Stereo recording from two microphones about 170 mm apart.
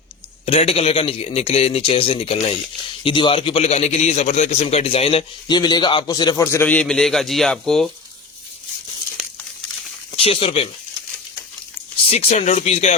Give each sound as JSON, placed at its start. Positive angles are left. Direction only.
{"t": 0.4, "sound": "a man's voice", "side_deg": 35}
{"t": 10.2, "sound": "a man's voice", "side_deg": 35}
{"t": 12.1, "sound": "a man's voice", "side_deg": 40}